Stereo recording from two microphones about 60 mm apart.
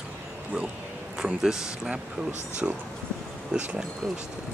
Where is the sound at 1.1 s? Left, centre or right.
Centre.